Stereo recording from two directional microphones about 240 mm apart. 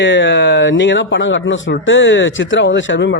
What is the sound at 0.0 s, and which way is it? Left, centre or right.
A man's voice, left.